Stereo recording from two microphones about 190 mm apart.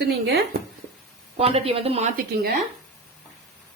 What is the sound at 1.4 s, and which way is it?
Speech, 30° right (ahead or behind).